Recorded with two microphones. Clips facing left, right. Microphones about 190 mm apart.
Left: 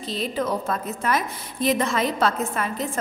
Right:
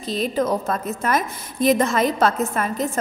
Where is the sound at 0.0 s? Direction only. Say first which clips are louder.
Right 4 dB; 45° right (ahead or behind).